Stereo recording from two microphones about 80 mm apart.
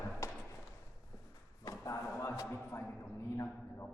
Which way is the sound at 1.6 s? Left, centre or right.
Left.